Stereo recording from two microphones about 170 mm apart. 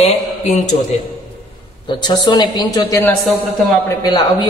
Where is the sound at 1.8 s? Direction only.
25° left (ahead or behind).